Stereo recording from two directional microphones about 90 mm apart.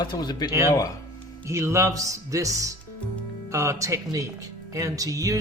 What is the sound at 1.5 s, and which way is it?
Speech, 30° right (ahead or behind).